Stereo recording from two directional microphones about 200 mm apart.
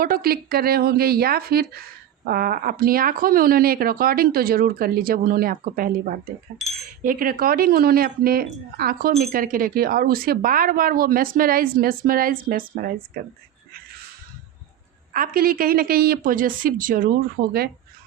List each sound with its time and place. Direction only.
0.0 s speech: 45° right (ahead or behind)
15.1 s speech: 45° right (ahead or behind)